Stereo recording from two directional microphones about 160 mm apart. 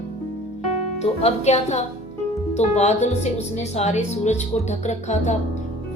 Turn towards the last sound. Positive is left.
turn(degrees=45)  # may be behind; listen again after turning